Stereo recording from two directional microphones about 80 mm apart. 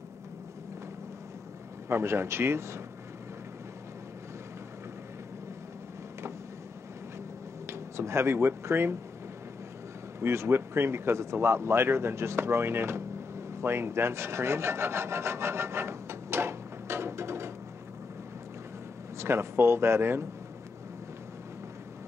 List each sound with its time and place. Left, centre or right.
1.9 s speech: right
7.6 s speech: right
10.2 s speech: right
13.6 s rub: right
19.1 s speech: right